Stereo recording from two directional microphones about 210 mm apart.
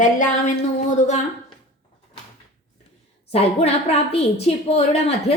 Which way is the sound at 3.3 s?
30° left (ahead or behind).